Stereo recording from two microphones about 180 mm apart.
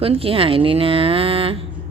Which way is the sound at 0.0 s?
30° right (ahead or behind).